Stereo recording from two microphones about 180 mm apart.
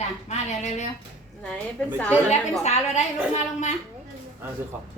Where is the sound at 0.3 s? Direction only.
40° left (ahead or behind).